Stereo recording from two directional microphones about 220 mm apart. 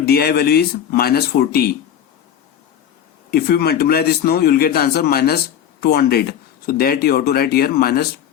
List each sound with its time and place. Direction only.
0.0 s speech: 45° left (ahead or behind)
3.3 s speech: 45° left (ahead or behind)